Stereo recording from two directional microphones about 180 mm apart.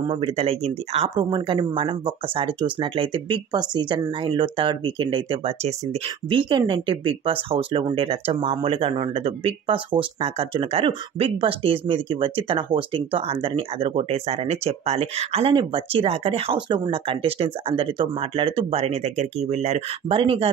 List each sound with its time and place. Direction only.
0.0 s speech: 30° right (ahead or behind)